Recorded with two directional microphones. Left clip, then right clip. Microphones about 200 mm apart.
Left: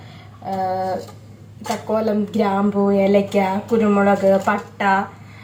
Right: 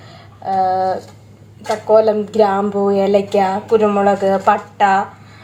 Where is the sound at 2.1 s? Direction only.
30° right (ahead or behind).